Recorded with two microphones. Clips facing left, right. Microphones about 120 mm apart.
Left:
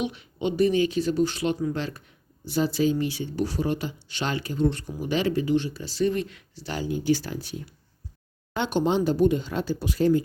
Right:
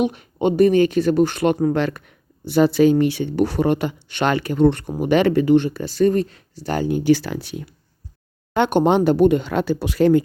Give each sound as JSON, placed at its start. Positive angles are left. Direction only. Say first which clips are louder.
{"t": 0.0, "sound": "speech", "louder": "right 8 dB", "side_deg": -50}
{"t": 8.5, "sound": "speech", "louder": "right 7 dB", "side_deg": -60}